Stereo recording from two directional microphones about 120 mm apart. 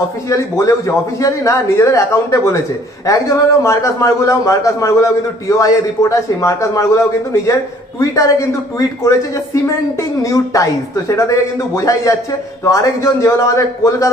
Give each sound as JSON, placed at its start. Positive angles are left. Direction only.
{"t": 0.3, "sound": "speech", "side_deg": 25}